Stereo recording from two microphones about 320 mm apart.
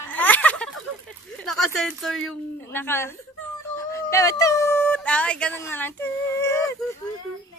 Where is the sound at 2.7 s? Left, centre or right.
Centre.